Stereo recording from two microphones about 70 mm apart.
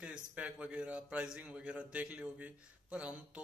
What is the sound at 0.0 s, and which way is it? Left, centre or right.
Speech, centre.